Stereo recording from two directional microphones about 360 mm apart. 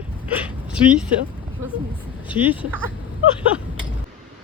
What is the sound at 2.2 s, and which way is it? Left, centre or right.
Speech, centre.